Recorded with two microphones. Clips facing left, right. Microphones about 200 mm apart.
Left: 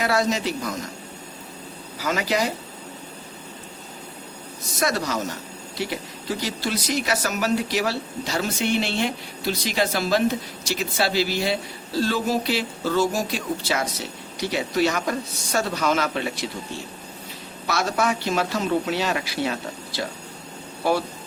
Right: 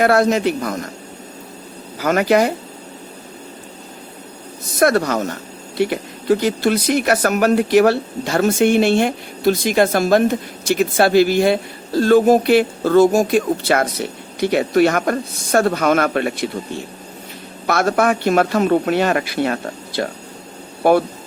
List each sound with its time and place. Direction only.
0.0 s speech: 55° right (ahead or behind)
2.0 s speech: 55° right (ahead or behind)
4.8 s speech: 55° right (ahead or behind)
17.7 s speech: 55° right (ahead or behind)